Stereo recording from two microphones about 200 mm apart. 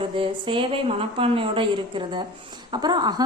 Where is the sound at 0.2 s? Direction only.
25° right (ahead or behind).